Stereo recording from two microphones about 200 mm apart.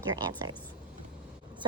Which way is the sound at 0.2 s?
20° right (ahead or behind).